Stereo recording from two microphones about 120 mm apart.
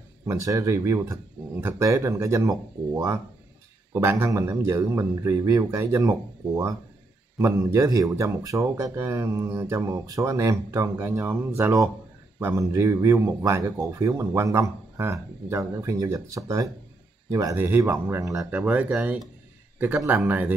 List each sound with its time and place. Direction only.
0.3 s speech: 25° right (ahead or behind)